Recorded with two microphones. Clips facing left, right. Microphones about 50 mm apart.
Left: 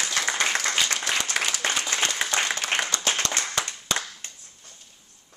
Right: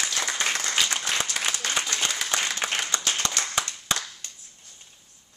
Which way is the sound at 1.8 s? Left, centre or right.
Left.